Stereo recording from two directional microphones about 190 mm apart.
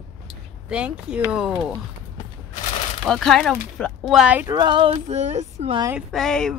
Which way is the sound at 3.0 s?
Centre (ahead or behind).